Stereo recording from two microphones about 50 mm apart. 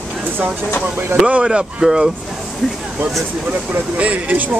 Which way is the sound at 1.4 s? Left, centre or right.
Centre.